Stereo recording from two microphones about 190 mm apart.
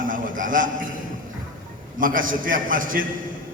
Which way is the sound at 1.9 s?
45° right (ahead or behind).